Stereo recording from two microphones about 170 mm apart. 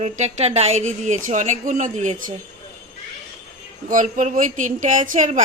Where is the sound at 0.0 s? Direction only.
40° right (ahead or behind).